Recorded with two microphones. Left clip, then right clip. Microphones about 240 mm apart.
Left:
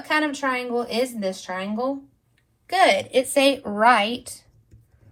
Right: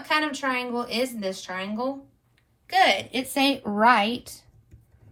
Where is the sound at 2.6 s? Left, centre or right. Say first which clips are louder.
Left 2 dB; centre; by 3.9 s left.